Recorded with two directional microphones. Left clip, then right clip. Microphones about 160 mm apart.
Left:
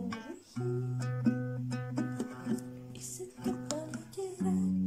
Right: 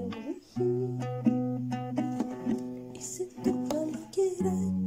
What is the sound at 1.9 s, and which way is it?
Music, 20° right (ahead or behind).